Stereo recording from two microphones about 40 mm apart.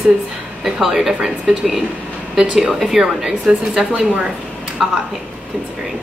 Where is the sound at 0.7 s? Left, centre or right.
Centre.